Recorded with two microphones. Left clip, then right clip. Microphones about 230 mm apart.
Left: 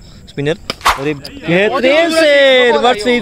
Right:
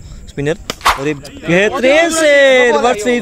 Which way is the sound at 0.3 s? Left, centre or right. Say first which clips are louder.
Left 1 dB; centre.